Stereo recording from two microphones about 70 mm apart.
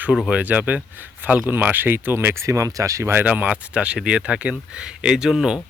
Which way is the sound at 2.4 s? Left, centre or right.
Right.